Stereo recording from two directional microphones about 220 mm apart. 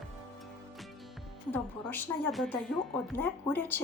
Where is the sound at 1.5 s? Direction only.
5° left (ahead or behind).